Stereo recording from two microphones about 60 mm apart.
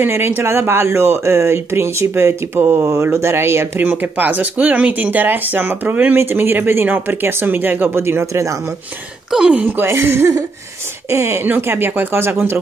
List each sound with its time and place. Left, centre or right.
0.1 s speech: right
2.6 s speech: right
2.9 s speech: right
3.8 s speech: right
8.3 s speech: right
9.5 s speech: right
9.8 s speech: right
11.4 s speech: right